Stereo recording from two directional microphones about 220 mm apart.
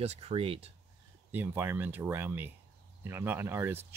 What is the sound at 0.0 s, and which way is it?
Speech, 30° right (ahead or behind).